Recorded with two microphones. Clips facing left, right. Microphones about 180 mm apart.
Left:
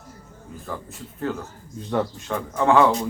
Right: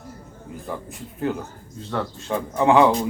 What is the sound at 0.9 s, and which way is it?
Speech, 20° right (ahead or behind).